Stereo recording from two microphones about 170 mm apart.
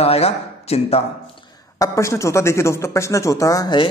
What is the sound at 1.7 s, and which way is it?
Speech, 20° left (ahead or behind).